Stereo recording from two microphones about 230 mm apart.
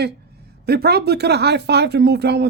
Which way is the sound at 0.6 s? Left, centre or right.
Right.